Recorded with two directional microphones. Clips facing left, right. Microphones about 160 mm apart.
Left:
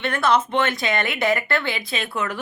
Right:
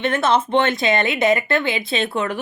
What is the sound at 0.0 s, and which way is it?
Speech, 20° right (ahead or behind).